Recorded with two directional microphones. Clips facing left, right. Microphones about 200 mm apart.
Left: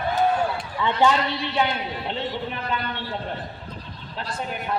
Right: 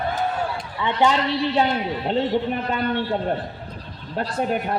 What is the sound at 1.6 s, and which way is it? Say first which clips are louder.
A man's voice: right 4 dB; 40° right (ahead or behind).